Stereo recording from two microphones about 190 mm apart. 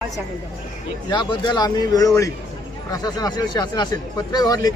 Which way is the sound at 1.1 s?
25° left (ahead or behind).